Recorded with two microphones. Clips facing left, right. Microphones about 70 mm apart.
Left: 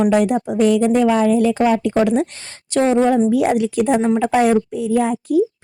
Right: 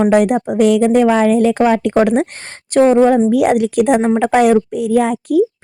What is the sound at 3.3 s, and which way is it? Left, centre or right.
Speech, right.